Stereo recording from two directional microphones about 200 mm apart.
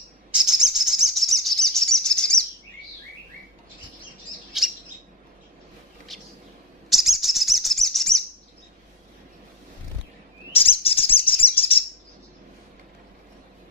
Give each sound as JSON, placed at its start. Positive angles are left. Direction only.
{"t": 0.3, "sound": "bird", "side_deg": -5}
{"t": 6.1, "sound": "a sound", "side_deg": 0}
{"t": 6.9, "sound": "bird", "side_deg": 0}
{"t": 10.5, "sound": "chirp", "side_deg": 30}